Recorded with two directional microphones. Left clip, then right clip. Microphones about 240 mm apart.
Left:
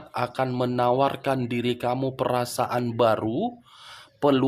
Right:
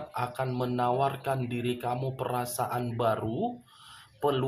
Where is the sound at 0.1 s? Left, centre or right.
Left.